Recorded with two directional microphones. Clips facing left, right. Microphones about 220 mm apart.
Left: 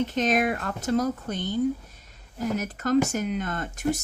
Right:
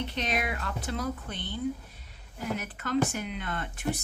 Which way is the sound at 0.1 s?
45° left (ahead or behind).